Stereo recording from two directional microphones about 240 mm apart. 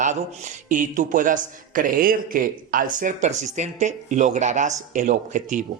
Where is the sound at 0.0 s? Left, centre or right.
Right.